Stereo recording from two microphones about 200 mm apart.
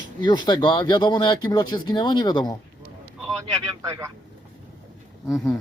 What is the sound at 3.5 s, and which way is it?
Speech, 15° right (ahead or behind).